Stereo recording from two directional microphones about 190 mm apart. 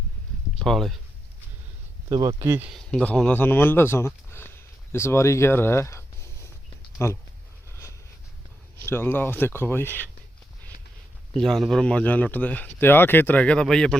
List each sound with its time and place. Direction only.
0.6 s speech: centre (ahead or behind)
2.0 s speech: 20° right (ahead or behind)
2.6 s speech: centre (ahead or behind)
8.8 s speech: 10° left (ahead or behind)
11.3 s speech: centre (ahead or behind)